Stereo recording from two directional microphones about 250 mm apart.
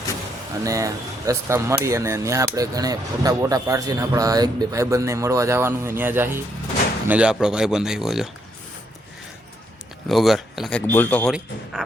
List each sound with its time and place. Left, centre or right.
0.6 s speech: centre
10.1 s speech: centre